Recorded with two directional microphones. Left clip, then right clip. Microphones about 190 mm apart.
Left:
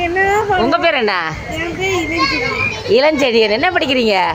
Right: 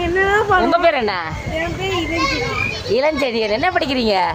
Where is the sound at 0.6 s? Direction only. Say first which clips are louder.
Left 1 dB; centre (ahead or behind).